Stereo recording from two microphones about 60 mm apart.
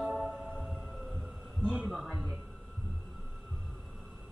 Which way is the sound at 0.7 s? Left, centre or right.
Centre.